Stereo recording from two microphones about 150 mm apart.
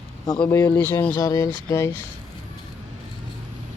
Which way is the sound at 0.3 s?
10° left (ahead or behind).